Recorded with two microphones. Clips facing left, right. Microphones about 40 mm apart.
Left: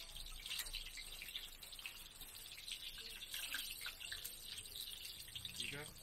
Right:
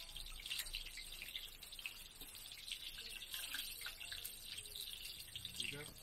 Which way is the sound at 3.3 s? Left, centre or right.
Left.